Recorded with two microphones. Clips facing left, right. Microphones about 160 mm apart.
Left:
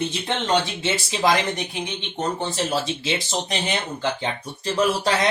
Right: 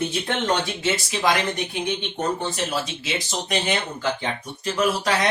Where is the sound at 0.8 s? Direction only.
25° left (ahead or behind).